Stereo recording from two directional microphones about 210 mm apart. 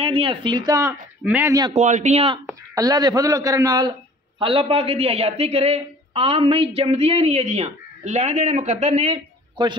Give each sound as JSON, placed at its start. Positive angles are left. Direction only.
{"t": 0.0, "sound": "a man's voice", "side_deg": -25}
{"t": 1.7, "sound": "speech", "side_deg": -35}
{"t": 2.4, "sound": "a man's voice", "side_deg": -15}